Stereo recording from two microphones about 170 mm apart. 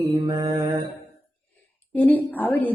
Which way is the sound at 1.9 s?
10° left (ahead or behind).